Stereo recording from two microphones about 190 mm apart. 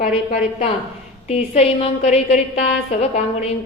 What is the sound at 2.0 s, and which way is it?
A woman's voice, 35° left (ahead or behind).